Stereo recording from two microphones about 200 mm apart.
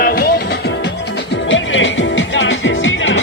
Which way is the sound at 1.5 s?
70° left (ahead or behind).